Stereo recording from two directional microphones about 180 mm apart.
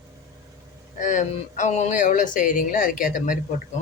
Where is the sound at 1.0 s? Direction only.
45° left (ahead or behind).